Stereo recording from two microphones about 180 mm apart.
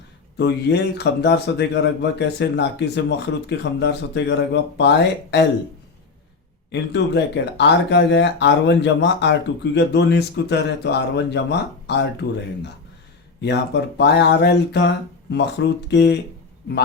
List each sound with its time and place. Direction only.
0.3 s speech: 70° left (ahead or behind)
6.7 s speech: 75° left (ahead or behind)
13.4 s speech: 70° left (ahead or behind)